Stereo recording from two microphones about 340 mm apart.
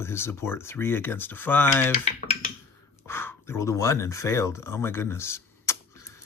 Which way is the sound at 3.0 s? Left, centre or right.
Centre.